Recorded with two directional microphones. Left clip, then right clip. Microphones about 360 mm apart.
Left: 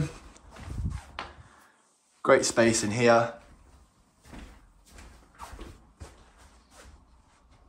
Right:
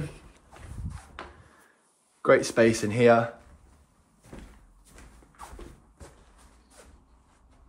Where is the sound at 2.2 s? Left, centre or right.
Centre.